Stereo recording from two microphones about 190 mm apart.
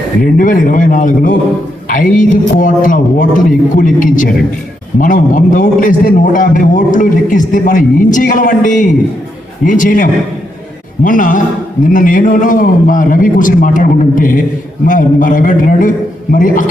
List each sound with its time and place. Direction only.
0.2 s a man's voice: 45° left (ahead or behind)